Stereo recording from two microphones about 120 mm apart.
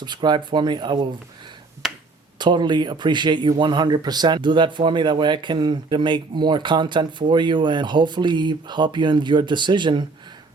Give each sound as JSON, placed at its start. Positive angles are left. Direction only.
{"t": 0.0, "sound": "speech", "side_deg": -40}
{"t": 1.8, "sound": "finger snapping", "side_deg": -5}
{"t": 2.4, "sound": "speech", "side_deg": -40}